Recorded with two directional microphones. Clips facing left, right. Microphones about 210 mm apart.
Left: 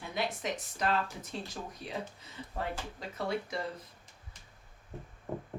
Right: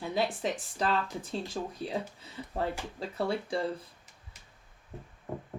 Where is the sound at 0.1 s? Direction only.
30° right (ahead or behind).